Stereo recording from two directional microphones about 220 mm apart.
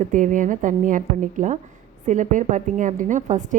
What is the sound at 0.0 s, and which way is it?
A woman's voice, 35° right (ahead or behind).